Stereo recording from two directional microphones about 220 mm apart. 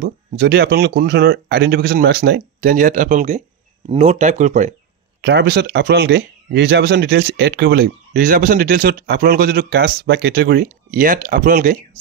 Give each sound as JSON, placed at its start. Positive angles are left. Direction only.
{"t": 0.0, "sound": "speech", "side_deg": -50}
{"t": 5.2, "sound": "speech", "side_deg": -50}